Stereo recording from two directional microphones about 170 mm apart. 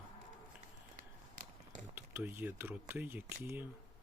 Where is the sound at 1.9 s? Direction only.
10° right (ahead or behind).